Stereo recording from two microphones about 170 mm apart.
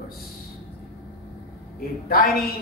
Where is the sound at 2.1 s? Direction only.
65° left (ahead or behind).